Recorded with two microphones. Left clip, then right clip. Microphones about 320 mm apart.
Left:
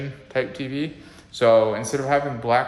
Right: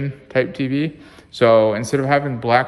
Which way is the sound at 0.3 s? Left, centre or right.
Right.